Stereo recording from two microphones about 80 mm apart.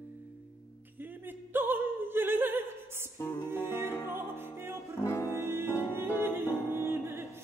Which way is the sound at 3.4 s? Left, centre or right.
Right.